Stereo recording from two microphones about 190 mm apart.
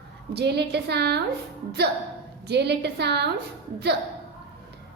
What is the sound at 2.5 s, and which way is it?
Speech, 60° right (ahead or behind).